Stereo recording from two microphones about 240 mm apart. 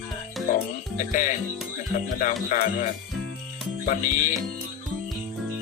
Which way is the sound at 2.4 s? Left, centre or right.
Left.